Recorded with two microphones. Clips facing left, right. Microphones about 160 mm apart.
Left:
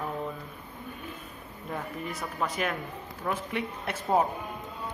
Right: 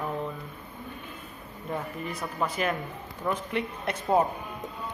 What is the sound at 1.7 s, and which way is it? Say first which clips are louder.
Speech: right 2 dB; centre (ahead or behind).